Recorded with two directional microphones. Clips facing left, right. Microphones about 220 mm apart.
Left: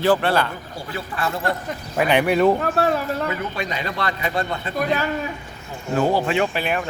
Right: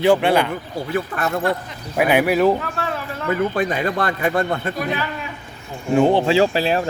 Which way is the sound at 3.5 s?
50° right (ahead or behind).